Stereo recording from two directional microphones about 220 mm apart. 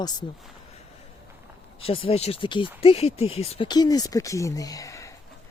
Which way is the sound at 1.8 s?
25° left (ahead or behind).